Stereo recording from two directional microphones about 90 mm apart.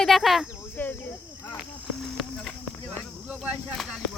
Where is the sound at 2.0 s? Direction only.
5° left (ahead or behind).